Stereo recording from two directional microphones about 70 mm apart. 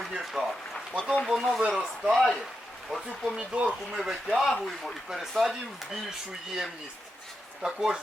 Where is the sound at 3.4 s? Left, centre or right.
Centre.